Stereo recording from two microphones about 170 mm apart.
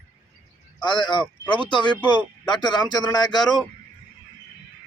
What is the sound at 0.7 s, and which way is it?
A man's voice, 25° left (ahead or behind).